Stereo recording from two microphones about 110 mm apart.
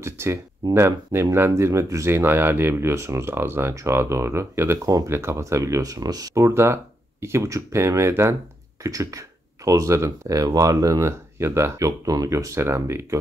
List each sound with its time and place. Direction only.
0.0 s speech: 25° right (ahead or behind)